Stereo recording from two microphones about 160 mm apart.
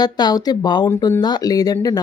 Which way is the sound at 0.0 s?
25° left (ahead or behind).